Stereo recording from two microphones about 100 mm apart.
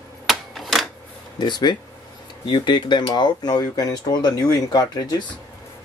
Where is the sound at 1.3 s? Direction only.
45° left (ahead or behind).